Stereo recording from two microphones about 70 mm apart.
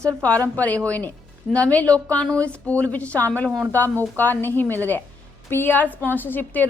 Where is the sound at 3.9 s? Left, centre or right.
Right.